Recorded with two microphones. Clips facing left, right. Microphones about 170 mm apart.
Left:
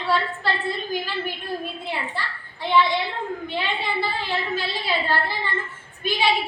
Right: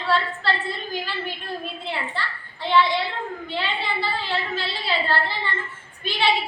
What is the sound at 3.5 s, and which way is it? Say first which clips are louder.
A woman's voice: right 2 dB; 15° left (ahead or behind).